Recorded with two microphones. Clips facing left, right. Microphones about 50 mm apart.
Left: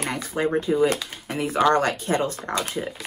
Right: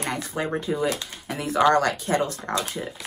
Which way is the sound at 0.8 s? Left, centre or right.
Left.